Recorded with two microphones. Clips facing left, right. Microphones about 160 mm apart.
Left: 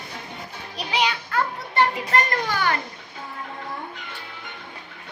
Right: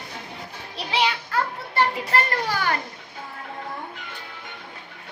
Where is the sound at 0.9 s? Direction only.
30° right (ahead or behind).